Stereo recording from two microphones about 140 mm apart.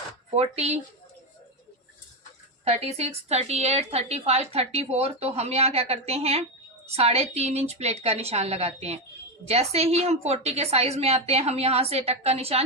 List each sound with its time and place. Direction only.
0.3 s a woman's voice: 50° right (ahead or behind)
2.6 s a woman's voice: 50° right (ahead or behind)